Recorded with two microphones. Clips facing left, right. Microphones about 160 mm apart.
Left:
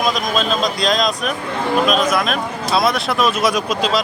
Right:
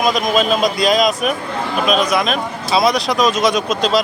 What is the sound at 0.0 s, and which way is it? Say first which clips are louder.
Speech: right 3 dB; 5° right (ahead or behind).